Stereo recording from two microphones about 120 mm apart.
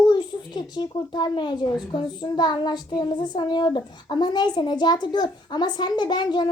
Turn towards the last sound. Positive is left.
turn(degrees=35)  # may be behind; listen again after turning